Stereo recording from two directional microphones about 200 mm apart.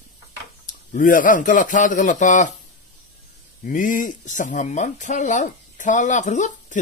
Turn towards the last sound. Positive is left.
turn(degrees=40)  # may be behind; listen again after turning